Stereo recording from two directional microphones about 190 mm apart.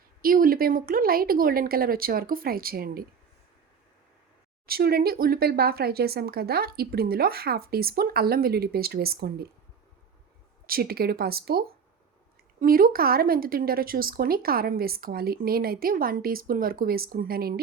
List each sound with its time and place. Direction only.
0.2 s speech: 50° right (ahead or behind)
4.6 s speech: 55° right (ahead or behind)
10.7 s speech: 50° right (ahead or behind)